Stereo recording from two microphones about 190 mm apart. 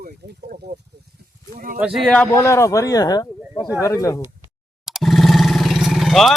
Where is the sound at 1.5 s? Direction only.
50° right (ahead or behind).